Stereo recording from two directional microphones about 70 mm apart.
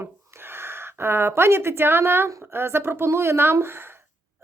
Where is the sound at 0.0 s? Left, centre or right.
Right.